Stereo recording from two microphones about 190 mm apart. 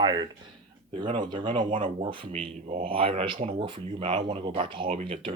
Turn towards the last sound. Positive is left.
turn(degrees=-30)  # may be behind; listen again after turning